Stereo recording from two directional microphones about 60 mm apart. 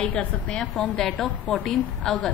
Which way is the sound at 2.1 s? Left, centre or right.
Centre.